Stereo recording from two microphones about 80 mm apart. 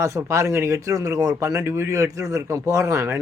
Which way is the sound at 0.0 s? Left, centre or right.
Right.